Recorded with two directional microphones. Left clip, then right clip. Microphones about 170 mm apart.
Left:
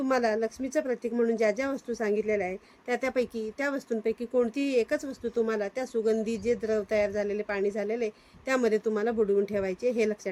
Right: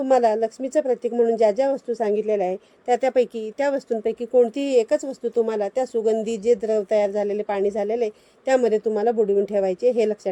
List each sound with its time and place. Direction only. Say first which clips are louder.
0.0 s a woman's voice: right 8 dB; 20° right (ahead or behind)